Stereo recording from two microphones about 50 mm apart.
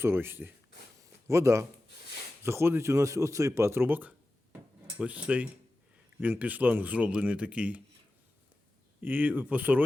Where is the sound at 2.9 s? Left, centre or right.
Right.